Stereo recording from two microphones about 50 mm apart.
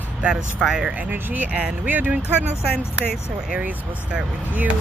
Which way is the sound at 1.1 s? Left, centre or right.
Right.